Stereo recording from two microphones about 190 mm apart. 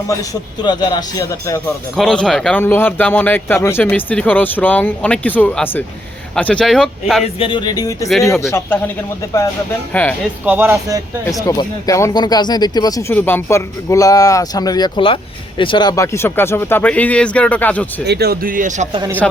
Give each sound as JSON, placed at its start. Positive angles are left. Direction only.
{"t": 0.1, "sound": "a man's voice", "side_deg": 20}
{"t": 2.0, "sound": "speech", "side_deg": 5}
{"t": 7.3, "sound": "a man's voice", "side_deg": 25}
{"t": 10.4, "sound": "speech", "side_deg": -10}
{"t": 11.4, "sound": "speech", "side_deg": 15}
{"t": 18.0, "sound": "speech", "side_deg": -60}
{"t": 19.2, "sound": "speech", "side_deg": 5}